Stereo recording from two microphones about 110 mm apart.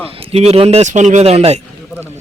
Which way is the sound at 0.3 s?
70° right (ahead or behind).